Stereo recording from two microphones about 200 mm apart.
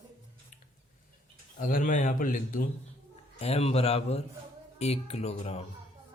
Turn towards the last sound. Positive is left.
turn(degrees=30)  # may be behind; listen again after turning